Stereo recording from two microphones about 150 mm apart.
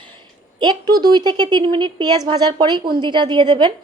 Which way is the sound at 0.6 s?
30° right (ahead or behind).